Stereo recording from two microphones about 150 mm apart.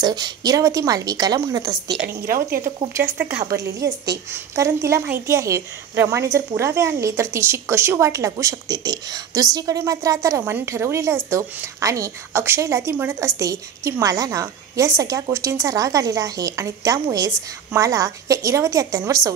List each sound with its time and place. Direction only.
0.0 s a woman's voice: 30° right (ahead or behind)
1.9 s speech: 90° right; by 2.7 s 70° right (ahead or behind)
3.4 s a woman's voice: 20° right (ahead or behind)